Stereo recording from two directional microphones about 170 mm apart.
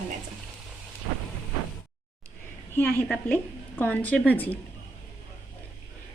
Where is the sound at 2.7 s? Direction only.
10° left (ahead or behind).